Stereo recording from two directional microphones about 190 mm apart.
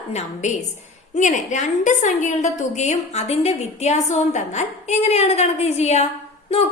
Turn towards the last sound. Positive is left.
turn(degrees=30)  # may be behind; listen again after turning